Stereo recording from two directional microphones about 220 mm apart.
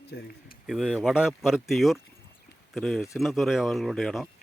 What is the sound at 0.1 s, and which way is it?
Speech, 45° left (ahead or behind).